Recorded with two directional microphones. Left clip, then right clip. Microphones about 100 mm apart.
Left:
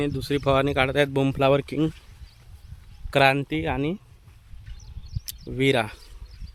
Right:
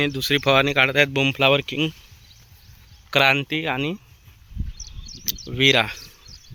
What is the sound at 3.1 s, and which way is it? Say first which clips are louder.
Speech: right 2 dB; 30° left (ahead or behind).